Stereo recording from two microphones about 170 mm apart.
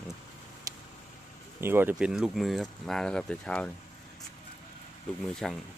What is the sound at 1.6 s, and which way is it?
Speech, 15° right (ahead or behind).